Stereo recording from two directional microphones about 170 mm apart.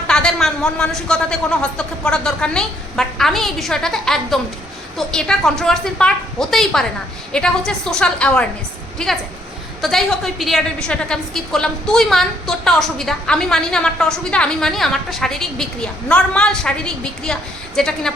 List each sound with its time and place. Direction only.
0.1 s a man's voice: 5° left (ahead or behind)